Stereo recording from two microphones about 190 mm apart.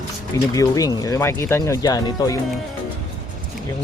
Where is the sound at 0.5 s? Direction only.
20° left (ahead or behind).